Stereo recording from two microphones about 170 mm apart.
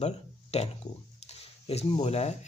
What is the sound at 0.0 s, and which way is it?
Speech, 35° left (ahead or behind).